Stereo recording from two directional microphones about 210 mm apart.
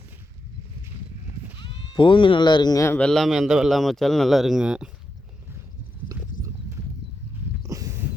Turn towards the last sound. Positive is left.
turn(degrees=-15)  # may be behind; listen again after turning